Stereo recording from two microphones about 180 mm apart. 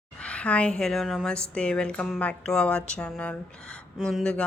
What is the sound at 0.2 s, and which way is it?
A woman's voice, 5° left (ahead or behind).